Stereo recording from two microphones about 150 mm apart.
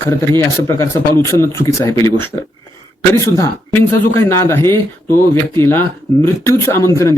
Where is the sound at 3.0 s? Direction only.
20° left (ahead or behind).